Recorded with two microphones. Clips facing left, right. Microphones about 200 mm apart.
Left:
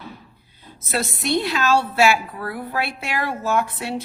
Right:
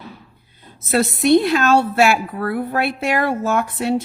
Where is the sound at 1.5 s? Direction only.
50° right (ahead or behind).